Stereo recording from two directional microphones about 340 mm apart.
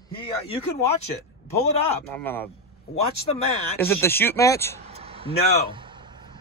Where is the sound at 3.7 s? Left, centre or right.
Centre.